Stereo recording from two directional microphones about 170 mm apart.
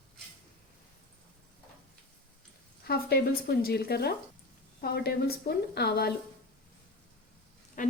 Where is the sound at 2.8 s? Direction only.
65° left (ahead or behind).